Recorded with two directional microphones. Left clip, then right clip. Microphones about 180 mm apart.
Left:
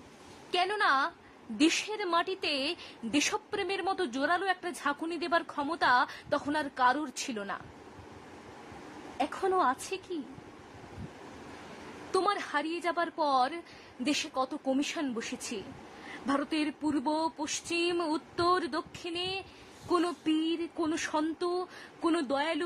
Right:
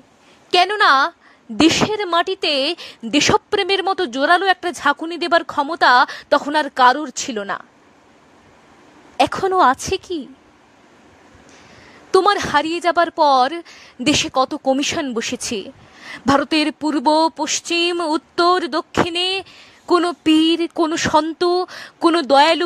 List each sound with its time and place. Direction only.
0.5 s a woman's voice: 55° right (ahead or behind)
9.2 s a woman's voice: 45° right (ahead or behind)
12.1 s a woman's voice: 50° right (ahead or behind)